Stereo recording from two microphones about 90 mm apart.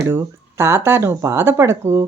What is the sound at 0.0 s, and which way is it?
Speech, 30° right (ahead or behind).